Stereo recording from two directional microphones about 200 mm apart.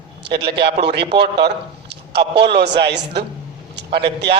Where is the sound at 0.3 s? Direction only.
55° right (ahead or behind).